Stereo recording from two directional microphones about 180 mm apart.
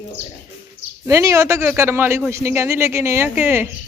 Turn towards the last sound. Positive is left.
turn(degrees=-10)  # may be behind; listen again after turning